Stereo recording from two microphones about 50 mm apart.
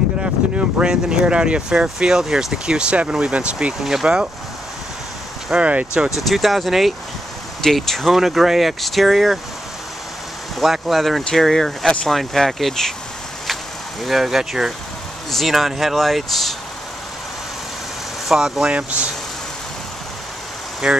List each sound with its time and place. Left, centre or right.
0.2 s speech: right
3.8 s speech: centre
5.5 s speech: right
6.2 s speech: centre
10.6 s speech: centre
14.0 s speech: centre
18.3 s speech: centre
18.7 s speech: right
20.8 s speech: centre